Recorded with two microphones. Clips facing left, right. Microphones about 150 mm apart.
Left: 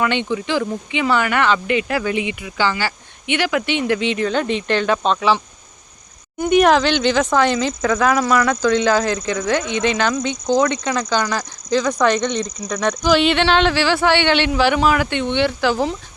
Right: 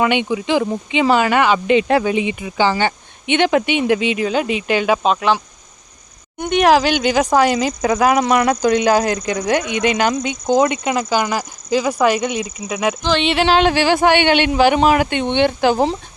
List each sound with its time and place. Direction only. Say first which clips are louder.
0.0 s speech: right 3 dB; 15° right (ahead or behind)
6.4 s a woman's voice: even; centre (ahead or behind)
6.8 s speech: right 1 dB; 10° right (ahead or behind)
10.7 s speech: right 2 dB; 10° right (ahead or behind)
13.0 s a sound: left 7 dB; 10° left (ahead or behind)
13.6 s speech: right 3 dB; 15° right (ahead or behind)